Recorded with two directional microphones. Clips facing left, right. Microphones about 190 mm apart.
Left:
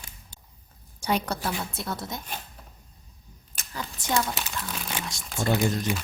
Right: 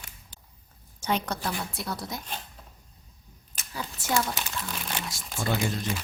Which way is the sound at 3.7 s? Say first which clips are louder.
Even; 5° right (ahead or behind).